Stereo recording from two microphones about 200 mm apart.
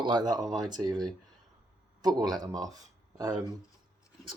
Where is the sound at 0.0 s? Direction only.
20° right (ahead or behind).